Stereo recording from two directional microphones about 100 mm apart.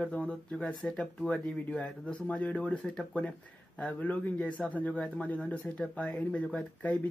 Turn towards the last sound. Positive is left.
turn(degrees=10)  # may be behind; listen again after turning